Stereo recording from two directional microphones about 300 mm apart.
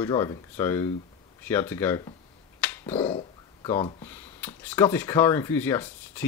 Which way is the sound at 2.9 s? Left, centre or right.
Centre.